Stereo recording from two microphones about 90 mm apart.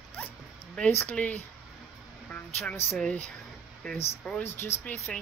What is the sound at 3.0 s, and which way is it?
Speech, 15° left (ahead or behind).